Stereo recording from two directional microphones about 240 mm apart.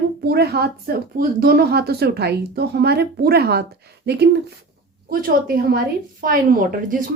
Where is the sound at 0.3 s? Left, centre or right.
Right.